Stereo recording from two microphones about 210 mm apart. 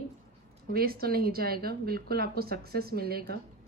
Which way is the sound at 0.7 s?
45° right (ahead or behind).